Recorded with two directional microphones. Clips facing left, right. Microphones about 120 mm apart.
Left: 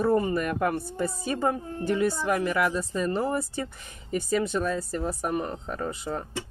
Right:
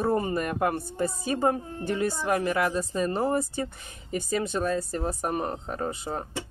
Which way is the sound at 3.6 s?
25° right (ahead or behind).